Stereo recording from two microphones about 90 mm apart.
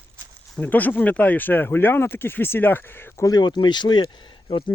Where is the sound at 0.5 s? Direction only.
20° left (ahead or behind).